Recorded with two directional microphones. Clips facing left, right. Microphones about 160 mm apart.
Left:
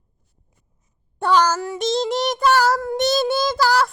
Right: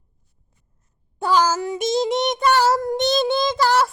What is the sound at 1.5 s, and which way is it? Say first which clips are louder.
Child singing: right 1 dB; 15° right (ahead or behind).